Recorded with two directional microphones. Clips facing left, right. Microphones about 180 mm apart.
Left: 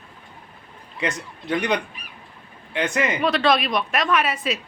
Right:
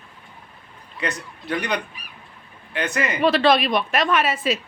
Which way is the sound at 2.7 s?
20° left (ahead or behind).